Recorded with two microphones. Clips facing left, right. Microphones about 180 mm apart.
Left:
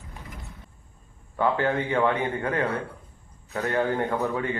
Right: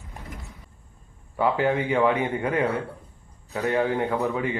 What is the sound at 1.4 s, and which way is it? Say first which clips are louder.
A man's voice: right 1 dB; 10° right (ahead or behind).